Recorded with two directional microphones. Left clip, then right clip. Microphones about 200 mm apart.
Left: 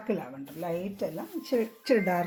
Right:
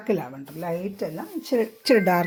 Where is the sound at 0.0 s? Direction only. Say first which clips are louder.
Right 6 dB; 45° right (ahead or behind).